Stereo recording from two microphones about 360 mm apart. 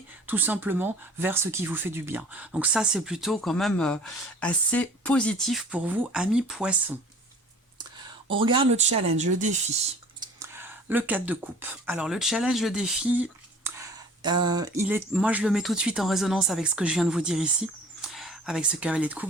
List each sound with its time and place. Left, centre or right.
0.3 s speech: centre
8.4 s speech: centre
10.2 s speech: centre
13.7 s a sound: centre
14.2 s speech: centre